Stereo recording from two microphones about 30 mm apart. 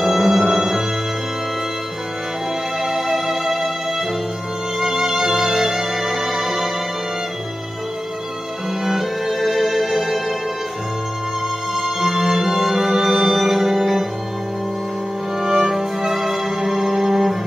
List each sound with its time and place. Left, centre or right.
0.0 s music: centre
2.8 s music: centre
4.7 s music: centre
9.4 s music: centre
11.7 s music: centre
15.5 s music: centre